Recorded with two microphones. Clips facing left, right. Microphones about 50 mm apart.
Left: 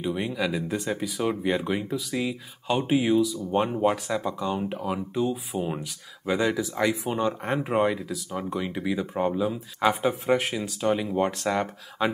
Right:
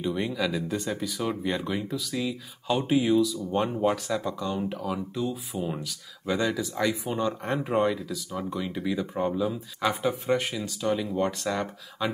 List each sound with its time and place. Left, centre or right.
0.0 s speech: centre
5.8 s speech: centre
9.8 s speech: left
10.2 s speech: centre
10.5 s speech: left